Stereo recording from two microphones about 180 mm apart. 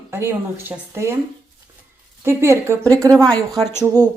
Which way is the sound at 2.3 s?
15° right (ahead or behind).